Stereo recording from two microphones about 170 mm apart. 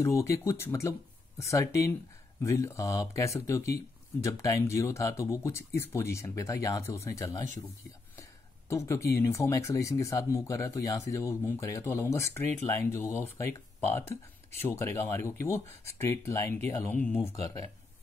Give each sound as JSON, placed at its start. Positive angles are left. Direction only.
{"t": 0.0, "sound": "speech", "side_deg": 15}
{"t": 8.2, "sound": "a sound", "side_deg": 15}
{"t": 9.2, "sound": "speech", "side_deg": 15}